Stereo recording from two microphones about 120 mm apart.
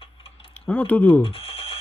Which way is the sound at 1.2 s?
55° left (ahead or behind).